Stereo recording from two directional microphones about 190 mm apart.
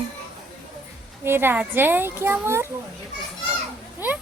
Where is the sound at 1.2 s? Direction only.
10° right (ahead or behind).